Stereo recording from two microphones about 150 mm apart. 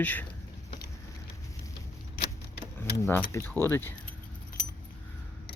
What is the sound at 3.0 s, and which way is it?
Speech, 15° left (ahead or behind).